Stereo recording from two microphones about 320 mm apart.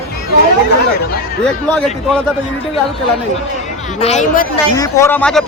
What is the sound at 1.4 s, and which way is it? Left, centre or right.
Speech, centre.